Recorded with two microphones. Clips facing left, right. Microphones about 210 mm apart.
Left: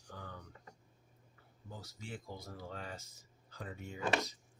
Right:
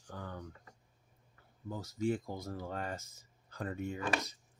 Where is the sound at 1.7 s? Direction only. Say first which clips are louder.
Right 13 dB; 45° right (ahead or behind).